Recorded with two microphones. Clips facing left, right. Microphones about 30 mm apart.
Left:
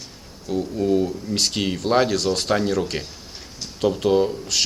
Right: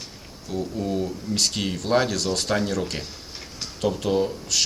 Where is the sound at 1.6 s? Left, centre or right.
Left.